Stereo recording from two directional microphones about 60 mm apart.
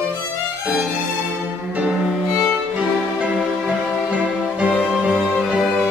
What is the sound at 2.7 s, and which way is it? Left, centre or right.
Music, right.